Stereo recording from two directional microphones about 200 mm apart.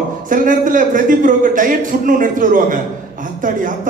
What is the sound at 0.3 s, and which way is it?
A man's voice, 40° right (ahead or behind).